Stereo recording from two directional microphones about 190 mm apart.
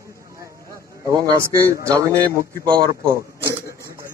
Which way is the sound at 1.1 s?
20° right (ahead or behind).